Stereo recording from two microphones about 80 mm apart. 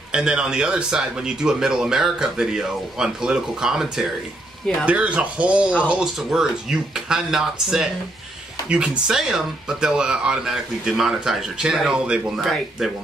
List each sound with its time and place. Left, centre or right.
0.1 s speech: centre
4.8 s speech: centre